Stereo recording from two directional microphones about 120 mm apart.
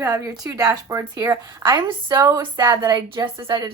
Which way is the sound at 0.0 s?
25° right (ahead or behind).